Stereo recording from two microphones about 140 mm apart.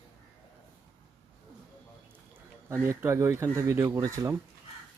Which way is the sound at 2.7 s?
20° right (ahead or behind).